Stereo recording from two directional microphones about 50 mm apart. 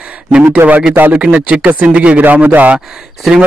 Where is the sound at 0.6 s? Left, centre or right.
Right.